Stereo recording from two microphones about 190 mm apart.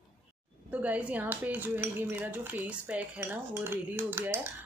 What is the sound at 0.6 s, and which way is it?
Dishes, 10° right (ahead or behind).